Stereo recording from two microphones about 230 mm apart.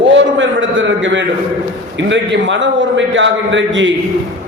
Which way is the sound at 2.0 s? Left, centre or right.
Right.